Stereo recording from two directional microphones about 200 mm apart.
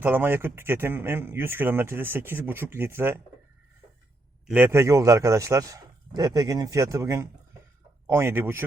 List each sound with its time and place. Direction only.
0.0 s speech: 10° right (ahead or behind)
4.4 s speech: 10° right (ahead or behind)